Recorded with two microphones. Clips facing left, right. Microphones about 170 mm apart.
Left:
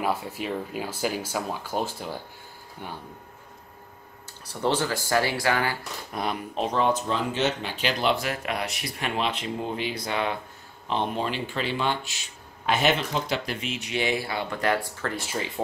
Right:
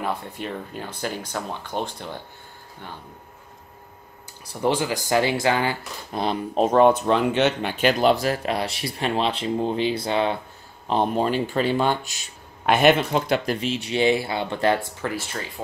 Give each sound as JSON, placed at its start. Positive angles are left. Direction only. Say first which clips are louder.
{"t": 0.0, "sound": "speech", "louder": "left 1 dB", "side_deg": 5}
{"t": 4.5, "sound": "speech", "louder": "right 3 dB", "side_deg": -10}
{"t": 6.6, "sound": "speech", "louder": "right 8 dB", "side_deg": -50}
{"t": 10.9, "sound": "speech", "louder": "right 6 dB", "side_deg": -40}
{"t": 12.6, "sound": "speech", "louder": "right 6 dB", "side_deg": -60}
{"t": 13.6, "sound": "speech", "louder": "right 6 dB", "side_deg": -30}